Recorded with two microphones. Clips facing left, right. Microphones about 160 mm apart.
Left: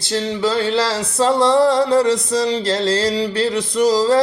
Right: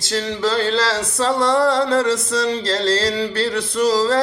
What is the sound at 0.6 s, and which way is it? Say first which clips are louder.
Music: left 1 dB; 15° left (ahead or behind).